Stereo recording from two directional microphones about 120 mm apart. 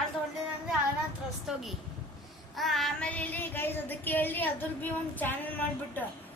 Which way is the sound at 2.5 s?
Centre (ahead or behind).